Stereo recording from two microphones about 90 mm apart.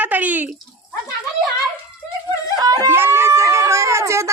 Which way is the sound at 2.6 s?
45° right (ahead or behind).